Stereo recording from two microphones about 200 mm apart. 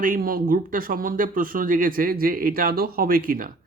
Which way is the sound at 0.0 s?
45° right (ahead or behind).